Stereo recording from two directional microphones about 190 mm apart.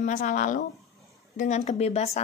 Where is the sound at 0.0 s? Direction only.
40° left (ahead or behind).